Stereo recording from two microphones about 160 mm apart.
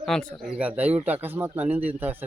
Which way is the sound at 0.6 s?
10° right (ahead or behind).